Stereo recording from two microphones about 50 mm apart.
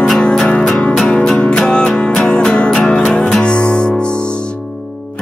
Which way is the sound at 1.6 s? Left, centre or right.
Centre.